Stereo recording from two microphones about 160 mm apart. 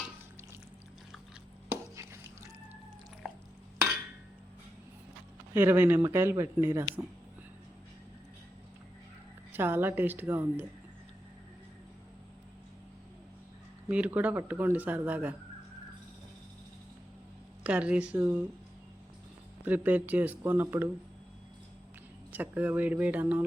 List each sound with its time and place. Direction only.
1.7 s drip: 20° right (ahead or behind)
3.2 s stir: centre (ahead or behind)
5.5 s speech: 15° right (ahead or behind)
9.5 s speech: 15° right (ahead or behind)
13.8 s speech: 10° right (ahead or behind)
17.6 s speech: 5° right (ahead or behind)
19.6 s speech: 10° right (ahead or behind)
22.3 s speech: 10° right (ahead or behind)